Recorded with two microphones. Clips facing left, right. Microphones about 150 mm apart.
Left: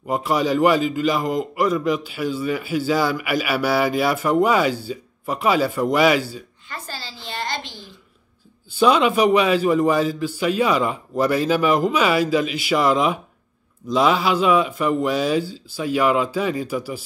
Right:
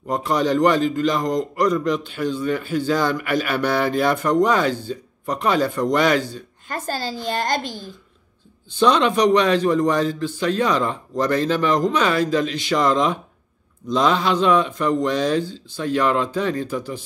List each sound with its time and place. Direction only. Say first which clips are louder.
0.0 s a man's voice: even; 5° left (ahead or behind)
6.7 s a woman's voice: right 9 dB; 45° right (ahead or behind)
8.7 s a man's voice: left 1 dB; 5° left (ahead or behind)